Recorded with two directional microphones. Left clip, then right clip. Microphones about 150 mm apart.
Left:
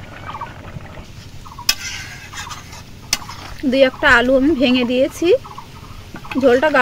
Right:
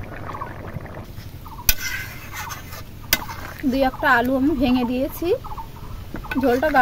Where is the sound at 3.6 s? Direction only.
40° left (ahead or behind).